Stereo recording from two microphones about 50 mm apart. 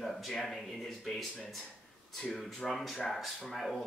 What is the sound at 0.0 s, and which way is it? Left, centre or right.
Speech, centre.